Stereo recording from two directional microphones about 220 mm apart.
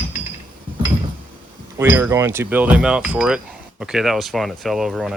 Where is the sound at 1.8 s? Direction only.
10° right (ahead or behind).